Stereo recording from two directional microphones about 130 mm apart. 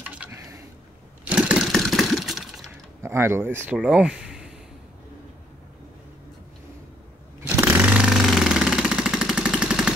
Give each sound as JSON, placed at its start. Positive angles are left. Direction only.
{"t": 1.2, "sound": "lawn mower", "side_deg": -5}
{"t": 2.7, "sound": "a sound", "side_deg": -20}
{"t": 3.7, "sound": "speech", "side_deg": -5}
{"t": 7.5, "sound": "vehicle", "side_deg": -10}